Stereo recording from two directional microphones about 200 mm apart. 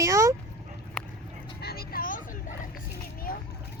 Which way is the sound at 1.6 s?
50° left (ahead or behind).